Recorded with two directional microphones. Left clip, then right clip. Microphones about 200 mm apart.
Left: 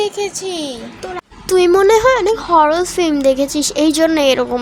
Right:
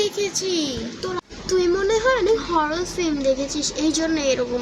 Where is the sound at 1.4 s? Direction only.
55° left (ahead or behind).